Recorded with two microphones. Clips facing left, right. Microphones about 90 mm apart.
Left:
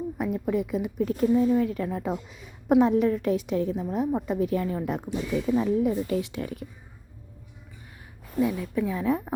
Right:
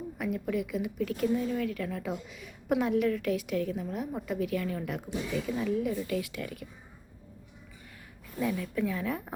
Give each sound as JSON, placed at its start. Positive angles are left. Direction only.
{"t": 0.2, "sound": "a woman's voice", "side_deg": 30}
{"t": 8.4, "sound": "a woman's voice", "side_deg": 15}